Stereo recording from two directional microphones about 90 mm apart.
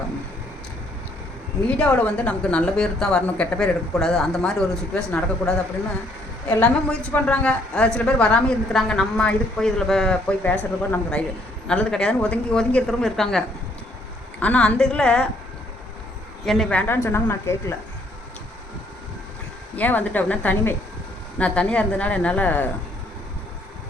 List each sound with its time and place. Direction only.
1.6 s a woman's voice: 15° left (ahead or behind)
6.6 s a woman's voice: 15° left (ahead or behind)
14.3 s a woman's voice: 15° left (ahead or behind)
16.5 s a woman's voice: 10° left (ahead or behind)
16.8 s a woman's voice: 25° left (ahead or behind)
19.7 s a woman's voice: 20° left (ahead or behind)